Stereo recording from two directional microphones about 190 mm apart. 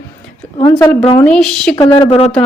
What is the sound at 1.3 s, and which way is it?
Speech, 5° left (ahead or behind).